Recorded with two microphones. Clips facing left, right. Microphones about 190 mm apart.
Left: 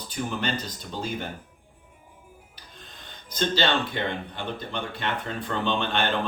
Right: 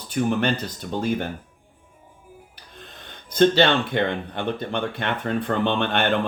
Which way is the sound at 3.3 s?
60° right (ahead or behind).